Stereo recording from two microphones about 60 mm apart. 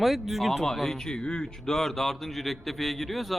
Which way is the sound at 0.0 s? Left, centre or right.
Centre.